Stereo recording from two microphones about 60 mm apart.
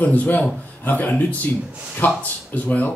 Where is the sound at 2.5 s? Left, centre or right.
Left.